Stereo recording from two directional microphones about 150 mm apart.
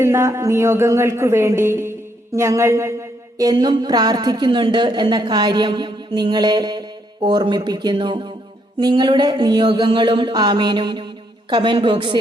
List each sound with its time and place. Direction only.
0.0 s speech: 20° right (ahead or behind)